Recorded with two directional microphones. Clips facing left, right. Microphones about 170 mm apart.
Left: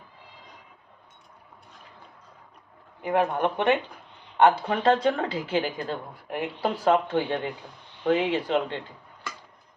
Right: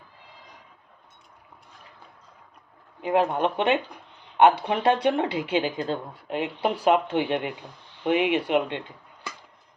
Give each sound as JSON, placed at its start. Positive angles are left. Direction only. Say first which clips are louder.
{"t": 3.0, "sound": "speech", "louder": "right 1 dB", "side_deg": -20}